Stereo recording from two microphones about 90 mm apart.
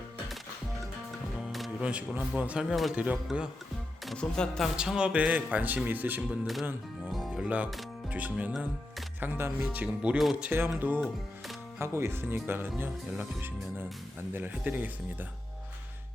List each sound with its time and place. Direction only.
1.8 s speech: 15° right (ahead or behind)
2.9 s speech: 15° right (ahead or behind)
4.0 s speech: 5° left (ahead or behind)
4.8 s speech: 10° right (ahead or behind)
7.0 s music: centre (ahead or behind)
7.4 s speech: 15° right (ahead or behind)
10.2 s speech: centre (ahead or behind)
10.8 s speech: 20° right (ahead or behind)